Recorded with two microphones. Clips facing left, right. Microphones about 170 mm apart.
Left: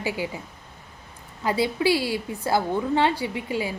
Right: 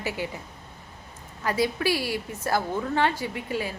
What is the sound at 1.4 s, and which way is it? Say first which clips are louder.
A woman's voice: left 2 dB; 20° left (ahead or behind).